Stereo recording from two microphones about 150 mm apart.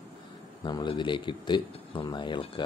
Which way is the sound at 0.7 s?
30° left (ahead or behind).